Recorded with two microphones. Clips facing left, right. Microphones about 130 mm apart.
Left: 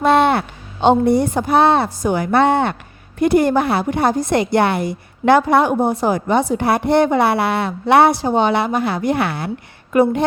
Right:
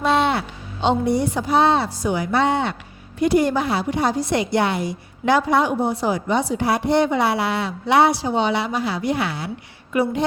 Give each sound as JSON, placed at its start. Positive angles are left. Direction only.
{"t": 0.0, "sound": "a woman's voice", "side_deg": 55}